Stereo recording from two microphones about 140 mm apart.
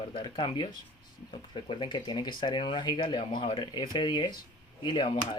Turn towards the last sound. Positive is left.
turn(degrees=35)  # may be behind; listen again after turning